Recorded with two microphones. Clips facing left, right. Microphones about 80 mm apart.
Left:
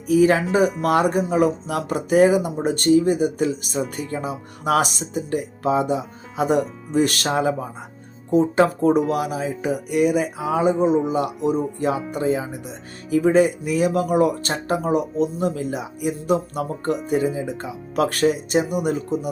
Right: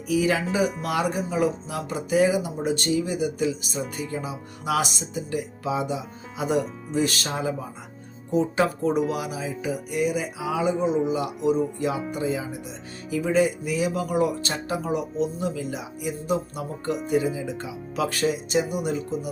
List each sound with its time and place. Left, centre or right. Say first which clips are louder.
0.1 s speech: left 7 dB; left
8.3 s speech: left 5 dB; left
10.5 s speech: left 5 dB; left